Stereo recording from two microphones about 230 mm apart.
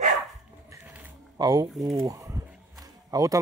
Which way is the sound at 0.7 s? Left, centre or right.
Centre.